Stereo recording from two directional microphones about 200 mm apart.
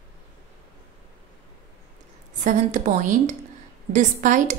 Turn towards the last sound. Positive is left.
turn(degrees=-40)  # may be behind; listen again after turning